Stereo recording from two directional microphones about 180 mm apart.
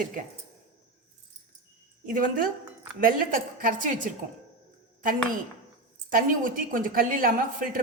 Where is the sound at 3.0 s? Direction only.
50° right (ahead or behind).